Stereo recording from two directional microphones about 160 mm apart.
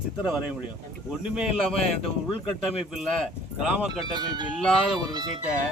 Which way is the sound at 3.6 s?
5° right (ahead or behind).